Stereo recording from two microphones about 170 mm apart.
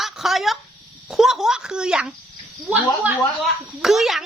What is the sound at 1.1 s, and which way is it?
Speech, centre (ahead or behind).